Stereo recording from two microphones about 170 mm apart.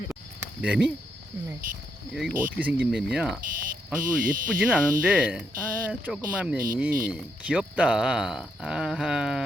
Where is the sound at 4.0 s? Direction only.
55° right (ahead or behind).